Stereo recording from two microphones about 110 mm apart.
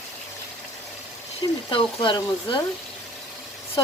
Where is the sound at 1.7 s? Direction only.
50° left (ahead or behind).